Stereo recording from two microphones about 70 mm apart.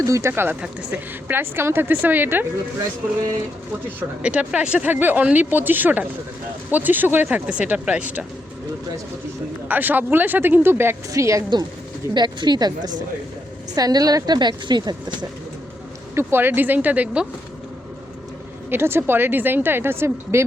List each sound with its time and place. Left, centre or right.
0.0 s speech: right
4.2 s speech: centre
9.6 s speech: right
11.1 s a woman's voice: right
12.1 s speech: right
13.7 s a woman's voice: right
16.1 s speech: right
18.7 s speech: right